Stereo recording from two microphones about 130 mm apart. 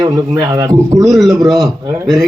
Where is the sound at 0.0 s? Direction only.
30° right (ahead or behind).